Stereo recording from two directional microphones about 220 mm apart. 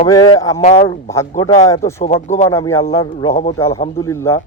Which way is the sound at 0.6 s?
30° left (ahead or behind).